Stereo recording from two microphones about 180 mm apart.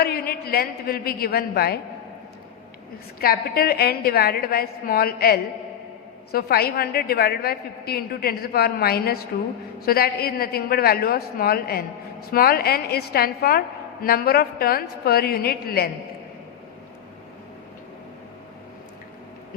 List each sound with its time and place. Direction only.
0.0 s a woman's voice: 60° left (ahead or behind)
3.2 s a woman's voice: 60° left (ahead or behind)